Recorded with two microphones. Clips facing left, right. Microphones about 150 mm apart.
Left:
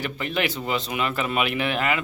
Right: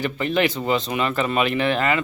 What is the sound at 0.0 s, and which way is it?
Speech, 5° left (ahead or behind).